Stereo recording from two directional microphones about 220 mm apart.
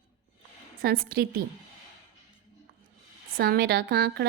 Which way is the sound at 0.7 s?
40° right (ahead or behind).